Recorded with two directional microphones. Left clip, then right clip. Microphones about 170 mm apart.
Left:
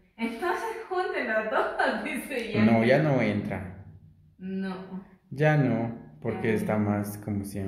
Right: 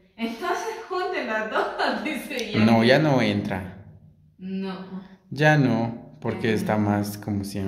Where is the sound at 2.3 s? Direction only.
15° right (ahead or behind).